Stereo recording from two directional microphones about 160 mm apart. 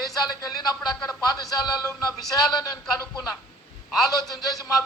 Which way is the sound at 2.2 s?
Centre (ahead or behind).